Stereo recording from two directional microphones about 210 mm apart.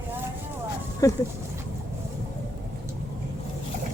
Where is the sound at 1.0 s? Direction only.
15° left (ahead or behind).